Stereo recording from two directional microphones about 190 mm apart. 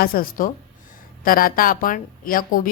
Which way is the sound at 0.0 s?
50° left (ahead or behind).